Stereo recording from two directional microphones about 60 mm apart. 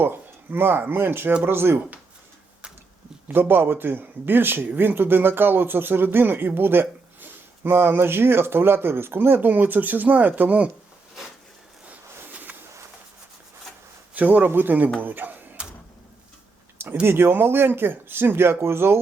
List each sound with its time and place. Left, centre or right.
0.0 s speech: right
3.2 s speech: right
11.9 s a sound: right
14.1 s speech: right
16.9 s speech: right